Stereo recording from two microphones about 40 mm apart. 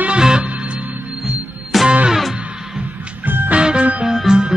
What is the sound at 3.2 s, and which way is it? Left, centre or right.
Music, right.